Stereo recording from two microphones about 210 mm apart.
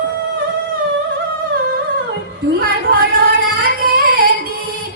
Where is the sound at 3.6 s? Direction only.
45° right (ahead or behind).